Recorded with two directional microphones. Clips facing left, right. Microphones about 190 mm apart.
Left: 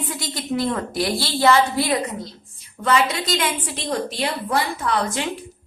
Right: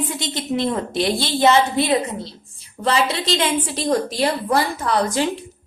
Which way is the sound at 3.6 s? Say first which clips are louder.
Right 5 dB; 40° right (ahead or behind).